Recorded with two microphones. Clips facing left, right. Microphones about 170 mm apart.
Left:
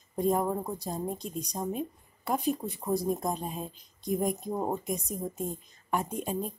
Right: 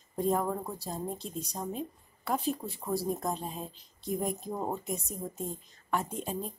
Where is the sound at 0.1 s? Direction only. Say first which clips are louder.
Left 2 dB; 15° left (ahead or behind).